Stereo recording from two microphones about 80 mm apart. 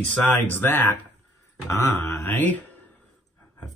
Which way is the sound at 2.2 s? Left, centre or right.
Left.